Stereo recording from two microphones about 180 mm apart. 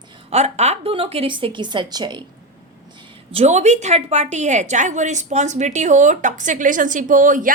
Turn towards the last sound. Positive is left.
turn(degrees=-45)  # may be behind; listen again after turning